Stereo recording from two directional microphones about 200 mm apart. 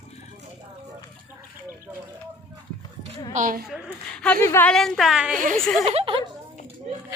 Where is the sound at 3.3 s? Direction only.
40° right (ahead or behind).